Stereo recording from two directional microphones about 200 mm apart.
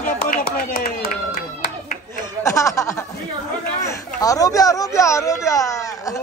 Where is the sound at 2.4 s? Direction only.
15° left (ahead or behind).